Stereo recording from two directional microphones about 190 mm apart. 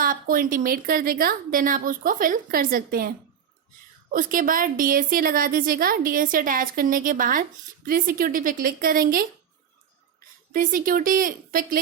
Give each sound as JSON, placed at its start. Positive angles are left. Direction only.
{"t": 0.0, "sound": "a woman's voice", "side_deg": -50}
{"t": 4.1, "sound": "a woman's voice", "side_deg": -45}
{"t": 10.5, "sound": "a woman's voice", "side_deg": -45}